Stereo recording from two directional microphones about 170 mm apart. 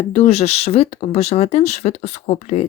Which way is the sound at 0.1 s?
35° left (ahead or behind).